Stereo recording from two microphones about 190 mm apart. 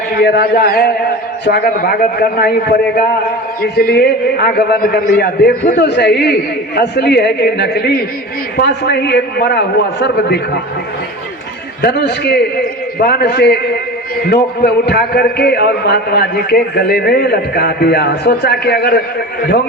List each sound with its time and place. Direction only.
0.2 s a man's voice: 60° left (ahead or behind)
11.8 s a man's voice: 60° left (ahead or behind)
14.6 s a man's voice: 55° left (ahead or behind)